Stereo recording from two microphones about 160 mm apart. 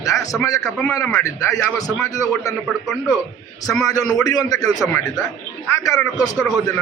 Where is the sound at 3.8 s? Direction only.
20° left (ahead or behind).